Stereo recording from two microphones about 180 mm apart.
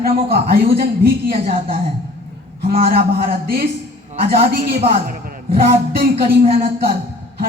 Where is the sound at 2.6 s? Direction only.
55° right (ahead or behind).